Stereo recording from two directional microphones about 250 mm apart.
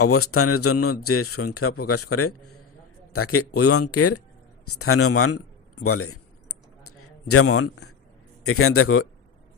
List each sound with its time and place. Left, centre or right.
0.0 s a man's voice: left
5.8 s a sound: left
8.4 s speech: left